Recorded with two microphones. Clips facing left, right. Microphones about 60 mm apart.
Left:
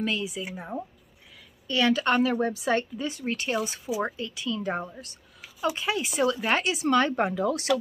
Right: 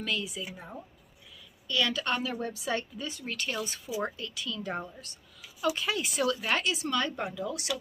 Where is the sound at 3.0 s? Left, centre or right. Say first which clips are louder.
Left 6 dB; left.